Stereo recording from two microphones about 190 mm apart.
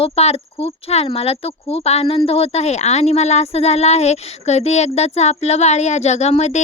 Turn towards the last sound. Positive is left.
turn(degrees=35)  # may be behind; listen again after turning